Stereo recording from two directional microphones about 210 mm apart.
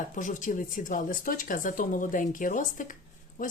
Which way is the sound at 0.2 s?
35° left (ahead or behind).